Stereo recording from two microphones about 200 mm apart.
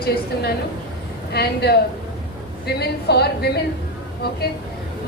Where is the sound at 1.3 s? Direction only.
55° left (ahead or behind).